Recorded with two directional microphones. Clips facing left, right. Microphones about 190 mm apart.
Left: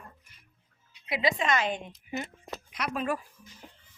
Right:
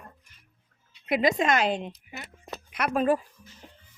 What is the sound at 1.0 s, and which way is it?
Speech, 45° right (ahead or behind).